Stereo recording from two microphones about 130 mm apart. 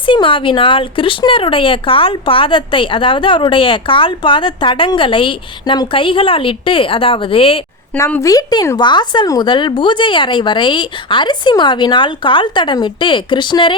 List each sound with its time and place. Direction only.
0.0 s speech: 40° left (ahead or behind)
7.9 s speech: 20° left (ahead or behind); by 13.7 s 40° left (ahead or behind)